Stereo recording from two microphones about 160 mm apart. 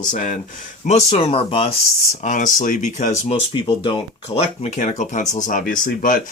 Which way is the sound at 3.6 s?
30° left (ahead or behind).